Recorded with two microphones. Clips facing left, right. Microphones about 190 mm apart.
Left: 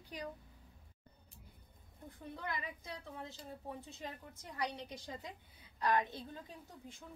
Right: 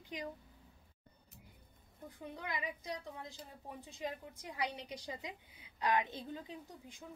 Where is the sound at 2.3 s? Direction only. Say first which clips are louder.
Right 1 dB; 15° right (ahead or behind).